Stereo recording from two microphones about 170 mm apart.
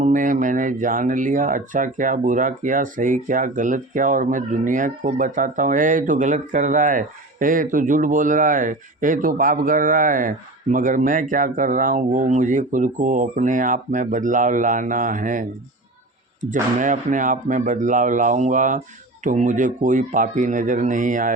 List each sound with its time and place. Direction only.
0.0 s speech: 50° right (ahead or behind)